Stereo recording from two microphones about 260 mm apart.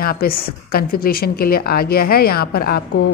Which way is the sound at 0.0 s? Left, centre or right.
Left.